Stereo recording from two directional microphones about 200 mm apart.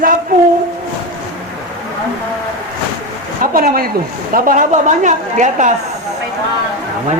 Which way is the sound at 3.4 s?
45° right (ahead or behind).